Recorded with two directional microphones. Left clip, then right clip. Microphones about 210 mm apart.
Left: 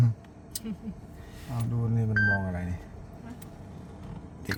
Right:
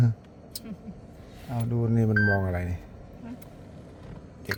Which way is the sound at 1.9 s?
45° right (ahead or behind).